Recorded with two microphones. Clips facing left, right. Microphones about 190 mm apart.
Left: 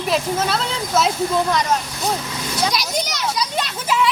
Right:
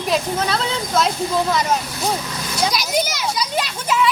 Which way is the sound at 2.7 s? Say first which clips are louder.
Right 2 dB; centre (ahead or behind).